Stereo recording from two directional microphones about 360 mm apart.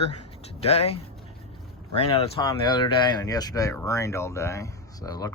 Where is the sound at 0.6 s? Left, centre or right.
Centre.